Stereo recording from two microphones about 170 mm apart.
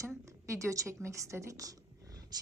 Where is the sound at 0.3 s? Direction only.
15° right (ahead or behind).